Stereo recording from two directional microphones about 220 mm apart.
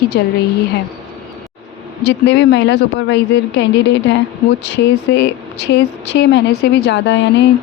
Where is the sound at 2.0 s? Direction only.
55° left (ahead or behind).